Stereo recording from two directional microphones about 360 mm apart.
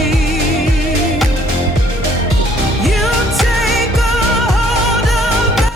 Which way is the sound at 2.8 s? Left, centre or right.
Centre.